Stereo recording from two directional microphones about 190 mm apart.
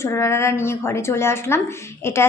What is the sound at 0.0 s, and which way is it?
A woman's voice, 15° left (ahead or behind).